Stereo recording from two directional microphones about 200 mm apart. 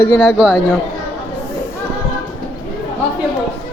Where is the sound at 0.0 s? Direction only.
10° left (ahead or behind).